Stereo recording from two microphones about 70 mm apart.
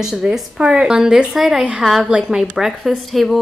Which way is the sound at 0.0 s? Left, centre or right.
Centre.